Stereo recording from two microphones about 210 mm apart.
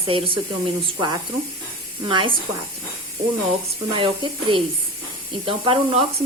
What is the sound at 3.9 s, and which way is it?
Speech, 25° right (ahead or behind).